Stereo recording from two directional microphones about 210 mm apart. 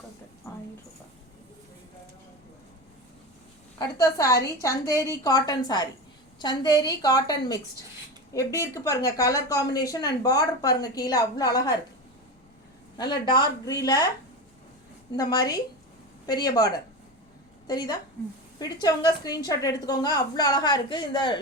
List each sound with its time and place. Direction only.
3.8 s a woman's voice: 15° left (ahead or behind)
13.0 s a woman's voice: 20° left (ahead or behind)
15.1 s a woman's voice: 20° left (ahead or behind)